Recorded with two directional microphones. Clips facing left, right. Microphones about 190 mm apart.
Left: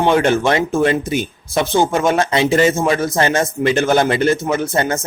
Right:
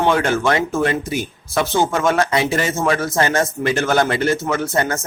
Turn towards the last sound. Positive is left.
turn(degrees=20)  # may be behind; listen again after turning